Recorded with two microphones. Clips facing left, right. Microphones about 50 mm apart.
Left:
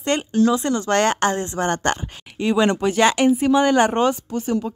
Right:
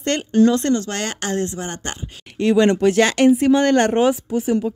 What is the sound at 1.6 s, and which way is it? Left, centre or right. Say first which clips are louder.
Speech: left 8 dB; left.